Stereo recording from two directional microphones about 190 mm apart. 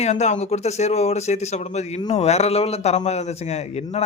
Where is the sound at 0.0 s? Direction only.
35° left (ahead or behind).